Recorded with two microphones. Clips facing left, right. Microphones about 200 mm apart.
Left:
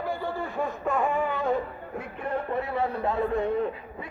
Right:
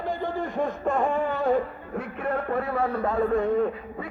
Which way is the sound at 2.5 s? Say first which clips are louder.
Right 2 dB; 50° right (ahead or behind).